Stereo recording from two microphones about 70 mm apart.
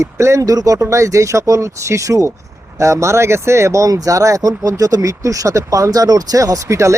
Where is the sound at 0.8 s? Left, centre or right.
Right.